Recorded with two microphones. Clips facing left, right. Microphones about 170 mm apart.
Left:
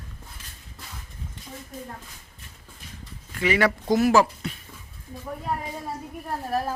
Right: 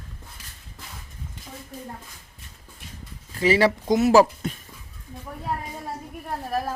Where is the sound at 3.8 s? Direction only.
20° right (ahead or behind).